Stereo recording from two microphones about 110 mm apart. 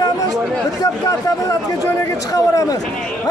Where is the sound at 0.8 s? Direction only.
30° left (ahead or behind).